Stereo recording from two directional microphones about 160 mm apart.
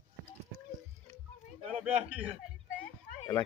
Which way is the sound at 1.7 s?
10° right (ahead or behind).